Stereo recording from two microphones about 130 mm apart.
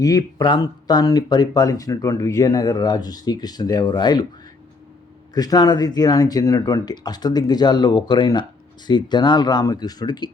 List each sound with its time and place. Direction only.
0.0 s speech: 30° left (ahead or behind)
5.3 s speech: 30° left (ahead or behind)